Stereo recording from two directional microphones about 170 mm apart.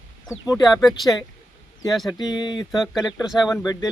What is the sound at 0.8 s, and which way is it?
Speech, centre (ahead or behind).